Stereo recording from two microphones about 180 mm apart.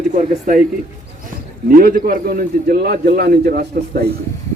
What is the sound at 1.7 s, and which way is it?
A man's voice, 55° right (ahead or behind).